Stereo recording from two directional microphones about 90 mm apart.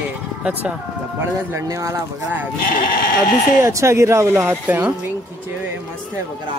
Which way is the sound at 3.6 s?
35° right (ahead or behind).